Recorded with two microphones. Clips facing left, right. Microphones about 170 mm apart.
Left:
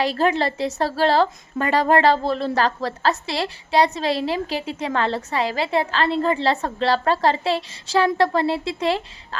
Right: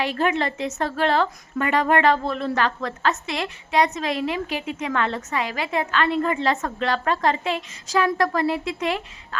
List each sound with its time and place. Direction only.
0.0 s a woman's voice: 35° left (ahead or behind)